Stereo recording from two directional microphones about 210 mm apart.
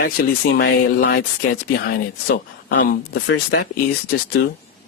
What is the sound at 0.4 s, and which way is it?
Speech, 55° left (ahead or behind).